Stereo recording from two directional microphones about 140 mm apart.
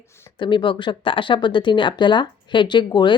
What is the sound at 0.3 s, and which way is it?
Speech, 35° left (ahead or behind).